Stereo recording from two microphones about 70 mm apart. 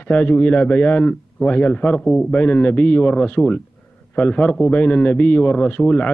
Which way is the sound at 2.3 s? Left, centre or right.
Centre.